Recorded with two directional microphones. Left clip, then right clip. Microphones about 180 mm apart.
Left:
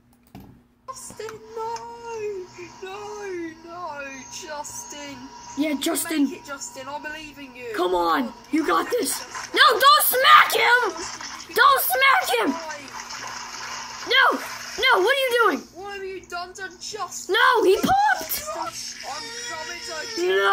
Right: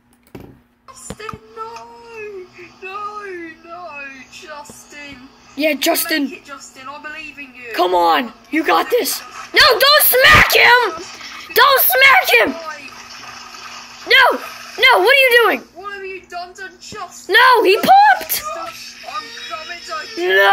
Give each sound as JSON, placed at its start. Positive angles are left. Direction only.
{"t": 5.8, "sound": "speech", "side_deg": 15}
{"t": 7.7, "sound": "speech", "side_deg": 15}
{"t": 14.0, "sound": "a sound", "side_deg": 15}
{"t": 14.8, "sound": "speech", "side_deg": 15}
{"t": 17.3, "sound": "speech", "side_deg": 15}